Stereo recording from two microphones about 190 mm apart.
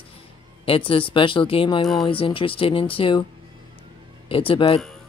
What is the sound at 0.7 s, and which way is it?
Speech, 30° left (ahead or behind).